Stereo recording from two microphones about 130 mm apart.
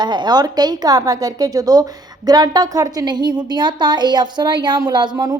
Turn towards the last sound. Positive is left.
turn(degrees=-30)  # may be behind; listen again after turning